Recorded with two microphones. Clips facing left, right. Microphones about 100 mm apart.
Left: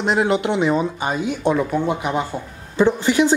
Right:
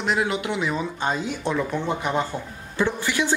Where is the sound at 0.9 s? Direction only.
10° left (ahead or behind).